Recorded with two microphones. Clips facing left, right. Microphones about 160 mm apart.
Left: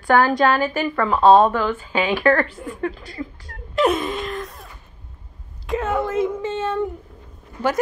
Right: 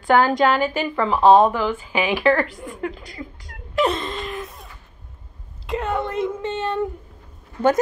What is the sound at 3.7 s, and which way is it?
Whimper, 5° left (ahead or behind).